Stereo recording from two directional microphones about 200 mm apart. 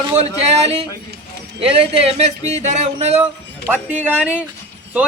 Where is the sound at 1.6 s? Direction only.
30° right (ahead or behind).